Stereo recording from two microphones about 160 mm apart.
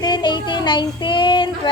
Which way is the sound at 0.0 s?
25° left (ahead or behind).